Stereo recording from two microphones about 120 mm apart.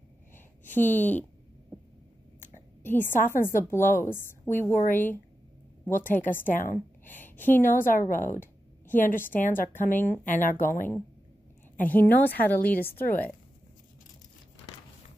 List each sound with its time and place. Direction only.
0.7 s a woman's voice: 15° left (ahead or behind)
2.8 s a woman's voice: 15° left (ahead or behind)
6.4 s speech: 90° left
7.1 s speech: 15° left (ahead or behind)
7.6 s speech: 90° left
8.2 s a woman's voice: 20° left (ahead or behind)
10.2 s speech: 90° left
11.9 s a woman's voice: 15° left (ahead or behind)